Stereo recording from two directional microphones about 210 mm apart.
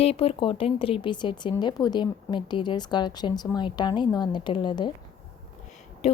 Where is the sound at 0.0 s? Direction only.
30° left (ahead or behind).